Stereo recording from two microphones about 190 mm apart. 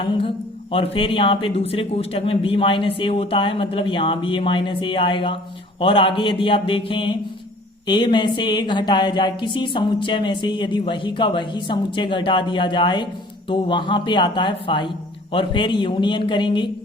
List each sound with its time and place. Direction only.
0.0 s speech: 30° left (ahead or behind)